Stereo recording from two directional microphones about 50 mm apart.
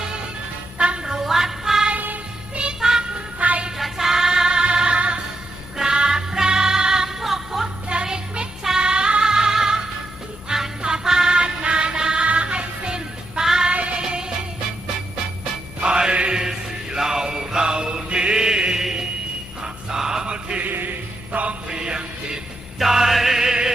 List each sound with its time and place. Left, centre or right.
0.8 s music: right
1.0 s music: centre
1.9 s child singing: right
2.6 s music: centre
3.3 s music: right
3.8 s music: centre
7.9 s music: centre
13.7 s music: right
15.8 s chant: centre
19.6 s a sound: centre
20.6 s music: right
21.7 s music: centre